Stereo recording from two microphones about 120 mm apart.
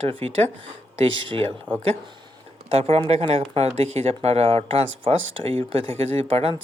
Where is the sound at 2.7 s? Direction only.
55° right (ahead or behind).